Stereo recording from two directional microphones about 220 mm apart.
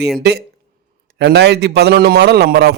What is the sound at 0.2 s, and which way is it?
A man's voice, 50° right (ahead or behind).